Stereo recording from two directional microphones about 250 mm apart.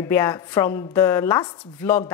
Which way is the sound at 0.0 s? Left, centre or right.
Centre.